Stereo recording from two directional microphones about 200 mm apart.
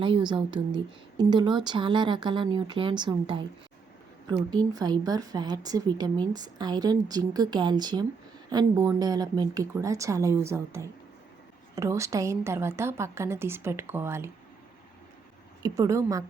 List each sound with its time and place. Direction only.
0.0 s speech: 25° right (ahead or behind)
4.5 s a woman's voice: 20° right (ahead or behind)
15.6 s a woman's voice: 15° right (ahead or behind)